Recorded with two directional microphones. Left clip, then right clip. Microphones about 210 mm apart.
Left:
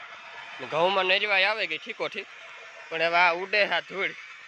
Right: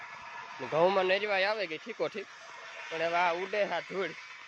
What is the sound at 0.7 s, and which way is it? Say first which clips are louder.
Speech: left 3 dB; 15° right (ahead or behind).